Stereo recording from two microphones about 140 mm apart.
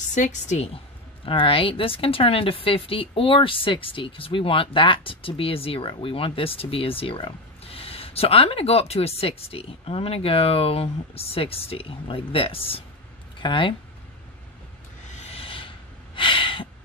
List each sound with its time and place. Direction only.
0.1 s a woman's voice: 60° left (ahead or behind)
1.2 s speech: 40° left (ahead or behind)
15.1 s a sound: 45° left (ahead or behind)